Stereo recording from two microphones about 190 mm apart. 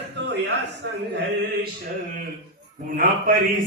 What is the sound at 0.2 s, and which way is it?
Speech, 65° right (ahead or behind).